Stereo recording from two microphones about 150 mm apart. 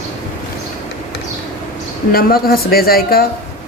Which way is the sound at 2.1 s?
85° left.